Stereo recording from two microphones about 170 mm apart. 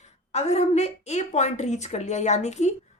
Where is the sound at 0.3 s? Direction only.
40° left (ahead or behind).